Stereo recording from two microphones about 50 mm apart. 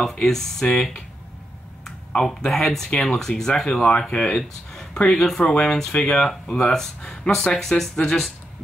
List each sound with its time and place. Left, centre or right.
0.0 s speech: centre
1.9 s speech: centre